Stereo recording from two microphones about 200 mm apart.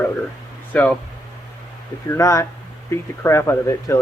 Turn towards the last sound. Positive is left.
turn(degrees=15)  # may be behind; listen again after turning